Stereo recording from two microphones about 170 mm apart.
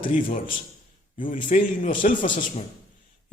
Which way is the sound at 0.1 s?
50° left (ahead or behind).